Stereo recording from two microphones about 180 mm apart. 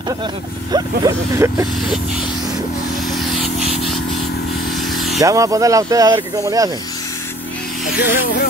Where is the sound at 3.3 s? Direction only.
Centre (ahead or behind).